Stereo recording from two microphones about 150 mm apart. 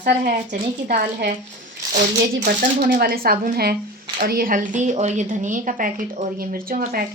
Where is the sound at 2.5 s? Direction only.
85° right.